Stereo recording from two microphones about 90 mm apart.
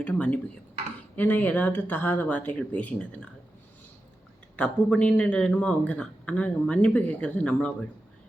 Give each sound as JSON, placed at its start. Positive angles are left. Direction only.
{"t": 0.0, "sound": "speech", "side_deg": 15}
{"t": 4.5, "sound": "speech", "side_deg": 15}